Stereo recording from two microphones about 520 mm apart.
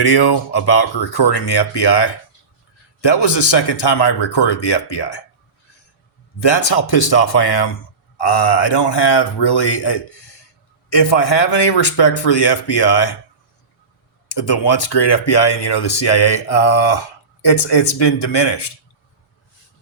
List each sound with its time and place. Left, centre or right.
0.0 s speech: left
6.4 s speech: left
14.3 s speech: left